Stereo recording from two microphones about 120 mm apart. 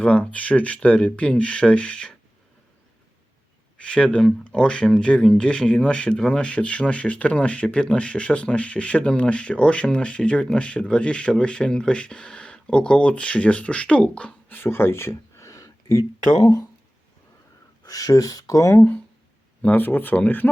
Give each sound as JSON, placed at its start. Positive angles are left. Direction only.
{"t": 0.0, "sound": "speech", "side_deg": 10}
{"t": 3.8, "sound": "speech", "side_deg": 10}
{"t": 17.8, "sound": "speech", "side_deg": 30}